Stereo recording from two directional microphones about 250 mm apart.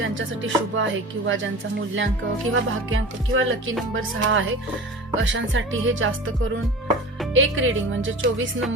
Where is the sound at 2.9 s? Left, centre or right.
Right.